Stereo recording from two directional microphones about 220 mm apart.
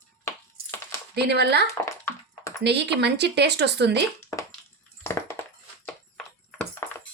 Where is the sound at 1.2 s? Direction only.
50° right (ahead or behind).